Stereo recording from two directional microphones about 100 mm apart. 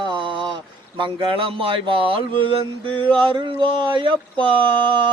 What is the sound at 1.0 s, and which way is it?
Speech, 55° right (ahead or behind).